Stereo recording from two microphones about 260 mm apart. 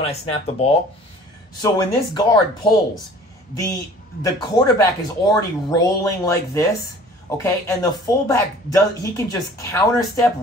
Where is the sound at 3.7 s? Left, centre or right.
Centre.